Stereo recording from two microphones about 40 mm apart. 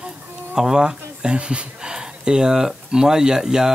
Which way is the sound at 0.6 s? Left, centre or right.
Centre.